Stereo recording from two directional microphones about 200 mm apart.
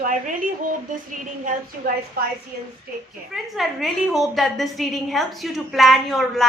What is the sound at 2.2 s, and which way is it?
Speech, 50° right (ahead or behind).